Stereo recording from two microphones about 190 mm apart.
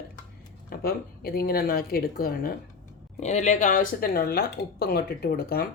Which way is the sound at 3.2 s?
35° left (ahead or behind).